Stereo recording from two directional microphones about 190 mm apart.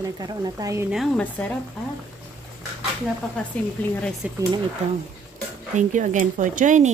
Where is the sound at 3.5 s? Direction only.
10° left (ahead or behind).